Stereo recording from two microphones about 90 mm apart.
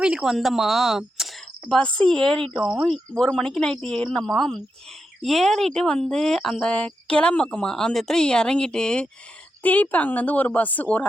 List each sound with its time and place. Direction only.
0.0 s speech: 5° right (ahead or behind)
2.5 s speech: 5° right (ahead or behind)
9.6 s speech: 20° left (ahead or behind)